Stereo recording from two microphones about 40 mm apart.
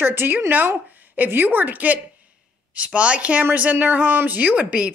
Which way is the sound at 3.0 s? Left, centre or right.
Right.